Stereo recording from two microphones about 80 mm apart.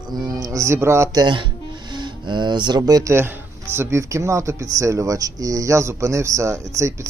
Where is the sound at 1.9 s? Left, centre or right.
Right.